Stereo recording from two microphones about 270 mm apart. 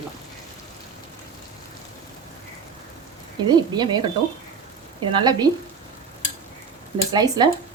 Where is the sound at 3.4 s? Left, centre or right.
Centre.